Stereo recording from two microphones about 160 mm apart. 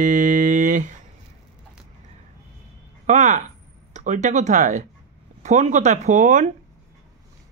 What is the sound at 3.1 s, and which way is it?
Speech, 45° right (ahead or behind).